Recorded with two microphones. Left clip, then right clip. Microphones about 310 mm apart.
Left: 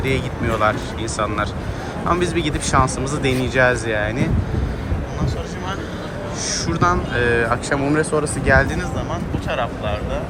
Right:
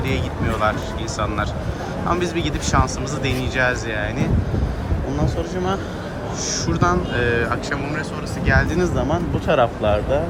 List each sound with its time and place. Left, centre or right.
0.0 s speech: centre
2.0 s speech: centre
6.5 s speech: centre
8.8 s speech: right